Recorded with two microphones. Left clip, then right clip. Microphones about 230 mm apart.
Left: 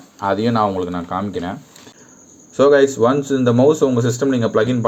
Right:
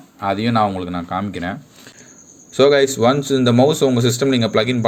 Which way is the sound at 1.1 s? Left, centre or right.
Right.